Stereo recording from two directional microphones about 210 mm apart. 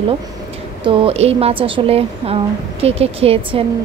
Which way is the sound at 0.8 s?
25° right (ahead or behind).